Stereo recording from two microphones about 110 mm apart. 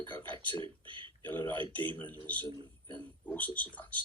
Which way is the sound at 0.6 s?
50° right (ahead or behind).